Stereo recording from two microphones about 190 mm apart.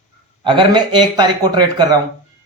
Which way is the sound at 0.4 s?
25° right (ahead or behind).